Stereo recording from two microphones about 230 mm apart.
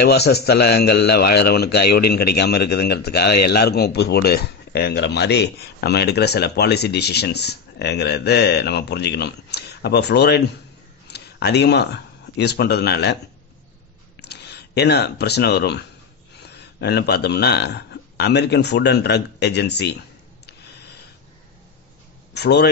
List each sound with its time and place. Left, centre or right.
0.0 s a man's voice: left
14.2 s speech: left
22.3 s a man's voice: left